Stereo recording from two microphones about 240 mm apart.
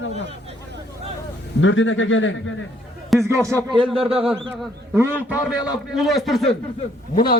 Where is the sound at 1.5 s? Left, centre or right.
Left.